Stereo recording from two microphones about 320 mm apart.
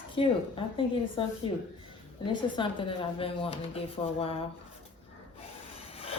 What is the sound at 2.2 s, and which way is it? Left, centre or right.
Speech, centre.